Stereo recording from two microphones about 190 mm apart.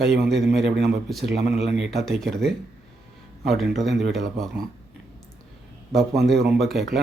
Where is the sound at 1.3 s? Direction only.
60° right (ahead or behind).